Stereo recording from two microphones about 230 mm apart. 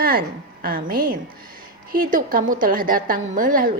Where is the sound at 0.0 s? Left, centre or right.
Right.